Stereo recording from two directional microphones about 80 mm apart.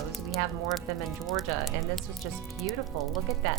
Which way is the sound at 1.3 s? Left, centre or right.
Centre.